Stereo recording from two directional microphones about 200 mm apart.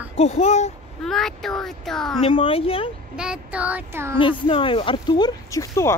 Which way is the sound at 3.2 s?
5° right (ahead or behind).